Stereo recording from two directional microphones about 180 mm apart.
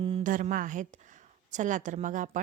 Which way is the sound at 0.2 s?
45° right (ahead or behind).